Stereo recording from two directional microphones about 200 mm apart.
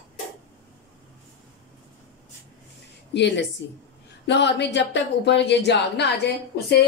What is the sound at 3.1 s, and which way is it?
A woman's voice, 60° left (ahead or behind).